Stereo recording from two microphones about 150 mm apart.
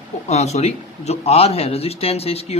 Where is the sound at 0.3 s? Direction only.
45° left (ahead or behind).